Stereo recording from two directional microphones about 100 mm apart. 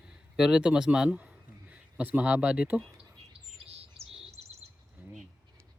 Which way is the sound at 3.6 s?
90° right.